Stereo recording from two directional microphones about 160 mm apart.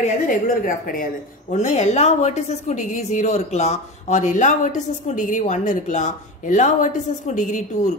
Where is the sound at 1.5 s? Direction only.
45° left (ahead or behind).